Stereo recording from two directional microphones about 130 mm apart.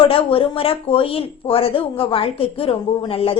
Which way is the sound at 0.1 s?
45° left (ahead or behind).